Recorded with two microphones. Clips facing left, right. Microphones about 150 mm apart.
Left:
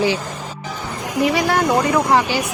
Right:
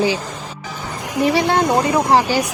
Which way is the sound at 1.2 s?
25° right (ahead or behind).